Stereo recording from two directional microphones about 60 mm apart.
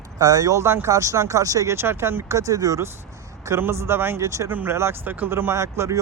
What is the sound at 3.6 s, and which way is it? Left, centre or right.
Speech, right.